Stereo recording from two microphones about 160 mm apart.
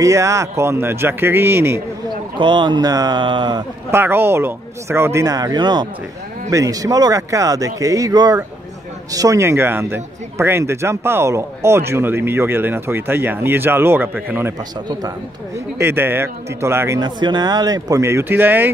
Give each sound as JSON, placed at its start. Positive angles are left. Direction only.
{"t": 0.0, "sound": "a man's voice", "side_deg": -20}
{"t": 2.3, "sound": "speech", "side_deg": -30}
{"t": 3.9, "sound": "a man's voice", "side_deg": -15}
{"t": 14.9, "sound": "speech", "side_deg": -25}
{"t": 15.8, "sound": "a man's voice", "side_deg": -15}
{"t": 17.0, "sound": "speech", "side_deg": -25}